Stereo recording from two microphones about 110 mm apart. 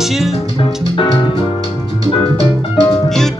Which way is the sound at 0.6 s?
50° left (ahead or behind).